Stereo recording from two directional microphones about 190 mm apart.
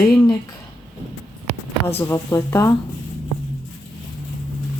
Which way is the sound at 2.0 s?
15° left (ahead or behind).